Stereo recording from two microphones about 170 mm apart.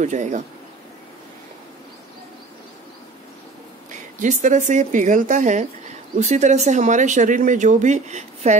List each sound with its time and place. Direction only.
0.0 s speech: 45° right (ahead or behind)
3.9 s speech: 45° right (ahead or behind)